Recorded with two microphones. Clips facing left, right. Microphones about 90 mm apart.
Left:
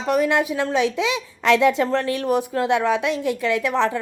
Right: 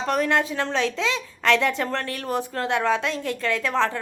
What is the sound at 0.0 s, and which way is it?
A woman's voice, 10° left (ahead or behind).